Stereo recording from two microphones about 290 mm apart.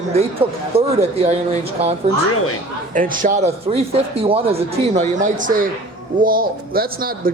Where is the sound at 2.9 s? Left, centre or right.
Right.